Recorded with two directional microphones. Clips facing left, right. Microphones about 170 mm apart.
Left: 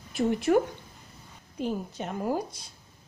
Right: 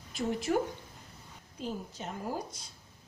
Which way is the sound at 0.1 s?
60° left (ahead or behind).